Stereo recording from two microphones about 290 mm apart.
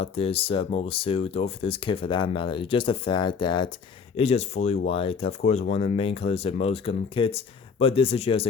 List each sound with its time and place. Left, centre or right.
0.0 s speech: centre